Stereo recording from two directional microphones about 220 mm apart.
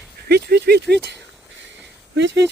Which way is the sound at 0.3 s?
50° right (ahead or behind).